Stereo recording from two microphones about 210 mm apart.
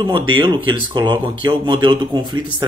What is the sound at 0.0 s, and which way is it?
Speech, 20° right (ahead or behind).